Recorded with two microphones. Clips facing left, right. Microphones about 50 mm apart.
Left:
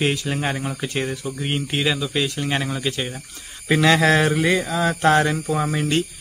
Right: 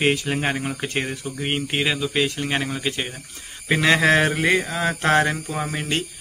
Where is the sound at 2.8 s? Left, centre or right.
Right.